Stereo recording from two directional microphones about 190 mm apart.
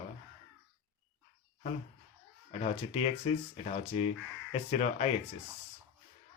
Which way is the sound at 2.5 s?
35° left (ahead or behind).